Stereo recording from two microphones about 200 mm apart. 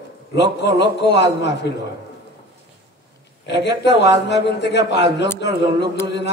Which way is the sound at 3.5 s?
60° left (ahead or behind).